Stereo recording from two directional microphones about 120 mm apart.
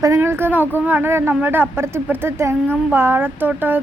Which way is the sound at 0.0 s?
20° right (ahead or behind).